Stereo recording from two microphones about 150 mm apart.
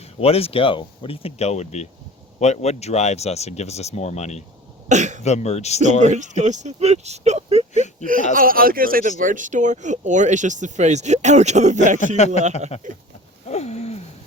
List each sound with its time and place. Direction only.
0.2 s speech: 40° left (ahead or behind)
4.9 s speech: 55° right (ahead or behind)
5.2 s speech: 50° left (ahead or behind)
5.8 s speech: 50° right (ahead or behind)
8.4 s speech: 70° right (ahead or behind); by 11.8 s 50° right (ahead or behind)
11.9 s speech: 50° left (ahead or behind)
13.5 s a sound: 45° left (ahead or behind)